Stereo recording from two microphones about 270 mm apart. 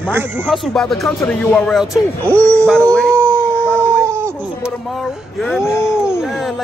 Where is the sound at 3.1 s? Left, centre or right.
Centre.